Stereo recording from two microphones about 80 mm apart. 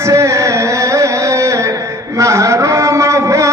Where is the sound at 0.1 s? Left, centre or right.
Right.